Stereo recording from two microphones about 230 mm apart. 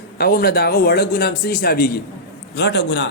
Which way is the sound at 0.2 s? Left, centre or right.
Left.